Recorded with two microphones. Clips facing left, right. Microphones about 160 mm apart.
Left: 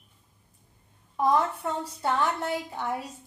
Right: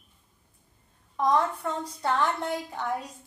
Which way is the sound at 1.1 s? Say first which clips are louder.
Even; 5° left (ahead or behind).